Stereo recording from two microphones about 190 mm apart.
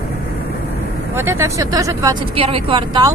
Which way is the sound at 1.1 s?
15° right (ahead or behind).